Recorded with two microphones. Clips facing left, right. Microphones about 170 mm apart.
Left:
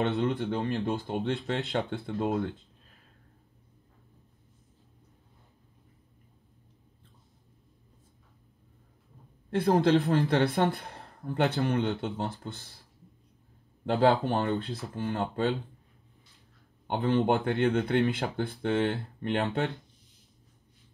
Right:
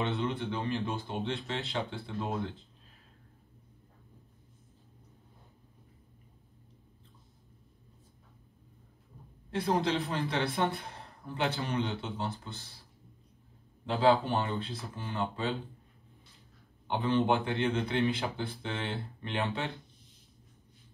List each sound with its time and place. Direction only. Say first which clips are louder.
0.2 s a man's voice: left 5 dB; 50° left (ahead or behind)
9.5 s a man's voice: left 7 dB; 55° left (ahead or behind)
13.8 s speech: left 2 dB; 50° left (ahead or behind)
16.8 s speech: left 3 dB; 50° left (ahead or behind)